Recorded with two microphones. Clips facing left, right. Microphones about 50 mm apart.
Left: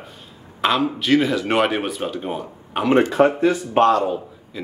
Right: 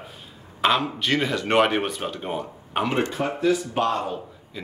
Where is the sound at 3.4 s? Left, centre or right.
Left.